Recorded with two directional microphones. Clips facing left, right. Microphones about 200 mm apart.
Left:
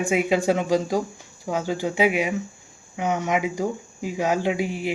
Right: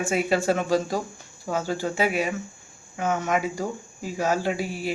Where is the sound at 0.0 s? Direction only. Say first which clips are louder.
Left 2 dB; 15° left (ahead or behind).